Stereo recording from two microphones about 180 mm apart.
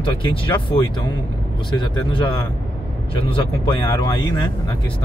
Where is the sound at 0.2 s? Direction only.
30° left (ahead or behind).